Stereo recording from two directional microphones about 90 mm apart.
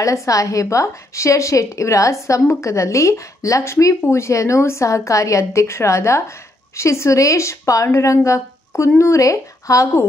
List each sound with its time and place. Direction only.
0.0 s a woman's voice: 35° left (ahead or behind)